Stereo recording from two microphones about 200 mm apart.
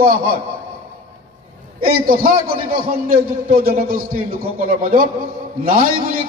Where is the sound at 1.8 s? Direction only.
45° right (ahead or behind).